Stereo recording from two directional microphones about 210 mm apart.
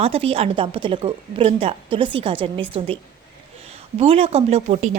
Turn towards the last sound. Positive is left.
turn(degrees=-35)  # may be behind; listen again after turning